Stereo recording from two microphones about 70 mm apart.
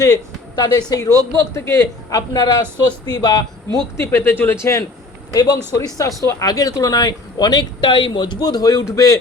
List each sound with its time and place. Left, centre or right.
0.0 s speech: left
1.0 s speech: left
2.0 s a man's voice: left
4.0 s speech: left
5.3 s speech: left
5.7 s speech: left